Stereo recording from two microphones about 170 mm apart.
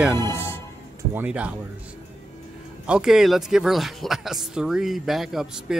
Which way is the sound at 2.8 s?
5° right (ahead or behind).